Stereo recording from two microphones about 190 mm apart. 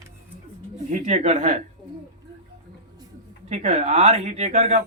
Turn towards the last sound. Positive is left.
turn(degrees=-35)  # may be behind; listen again after turning